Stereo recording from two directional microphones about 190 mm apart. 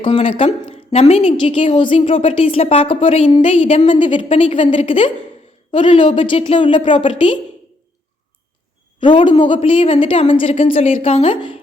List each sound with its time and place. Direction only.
0.0 s a woman's voice: 30° left (ahead or behind)
9.0 s a man's voice: 25° left (ahead or behind)